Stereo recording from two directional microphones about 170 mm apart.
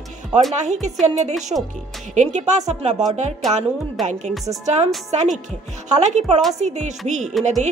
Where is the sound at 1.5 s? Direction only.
30° right (ahead or behind).